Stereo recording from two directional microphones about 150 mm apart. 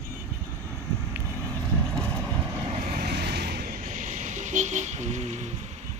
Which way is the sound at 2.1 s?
20° right (ahead or behind).